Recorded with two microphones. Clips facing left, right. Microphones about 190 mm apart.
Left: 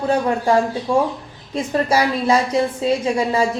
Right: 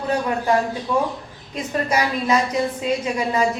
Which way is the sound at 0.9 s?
25° left (ahead or behind).